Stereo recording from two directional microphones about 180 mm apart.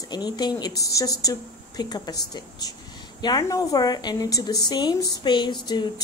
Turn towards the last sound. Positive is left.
turn(degrees=25)  # may be behind; listen again after turning